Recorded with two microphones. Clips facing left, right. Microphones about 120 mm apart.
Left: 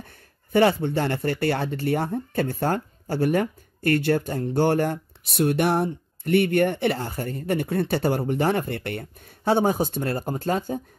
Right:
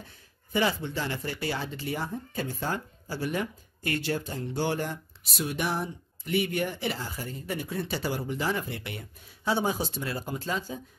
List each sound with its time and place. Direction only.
0.0 s speech: 60° left (ahead or behind)